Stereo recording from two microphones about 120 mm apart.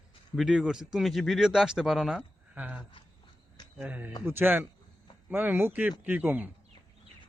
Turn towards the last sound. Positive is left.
turn(degrees=-15)  # may be behind; listen again after turning